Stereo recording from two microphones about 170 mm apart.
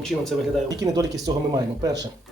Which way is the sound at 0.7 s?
20° right (ahead or behind).